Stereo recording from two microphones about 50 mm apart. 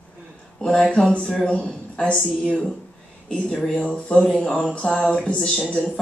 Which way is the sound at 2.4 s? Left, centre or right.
Centre.